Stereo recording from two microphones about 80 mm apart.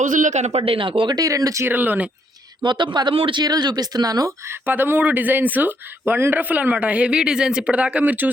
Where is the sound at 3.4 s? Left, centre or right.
Right.